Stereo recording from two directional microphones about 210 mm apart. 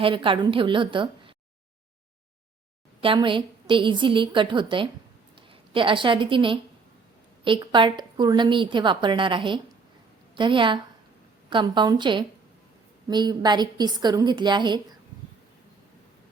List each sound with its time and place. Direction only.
0.0 s a woman's voice: 25° right (ahead or behind)
3.0 s a woman's voice: 25° right (ahead or behind)